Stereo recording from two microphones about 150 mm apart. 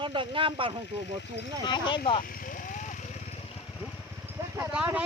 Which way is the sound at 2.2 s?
70° left (ahead or behind).